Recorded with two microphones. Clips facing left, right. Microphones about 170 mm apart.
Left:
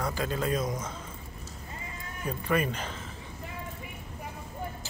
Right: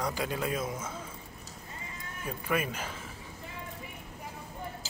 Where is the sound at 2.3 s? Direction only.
5° right (ahead or behind).